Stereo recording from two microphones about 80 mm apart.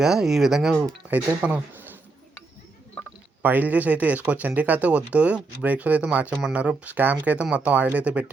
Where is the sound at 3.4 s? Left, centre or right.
Right.